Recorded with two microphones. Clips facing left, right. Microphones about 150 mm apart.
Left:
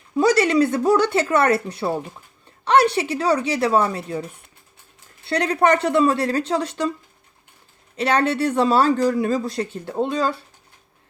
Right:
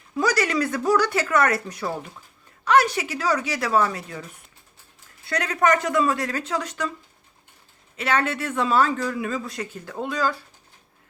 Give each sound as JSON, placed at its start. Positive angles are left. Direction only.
{"t": 0.1, "sound": "speech", "side_deg": 25}
{"t": 7.9, "sound": "speech", "side_deg": 35}